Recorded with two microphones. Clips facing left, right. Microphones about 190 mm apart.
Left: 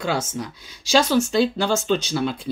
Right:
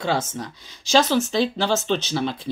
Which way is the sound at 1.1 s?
Centre (ahead or behind).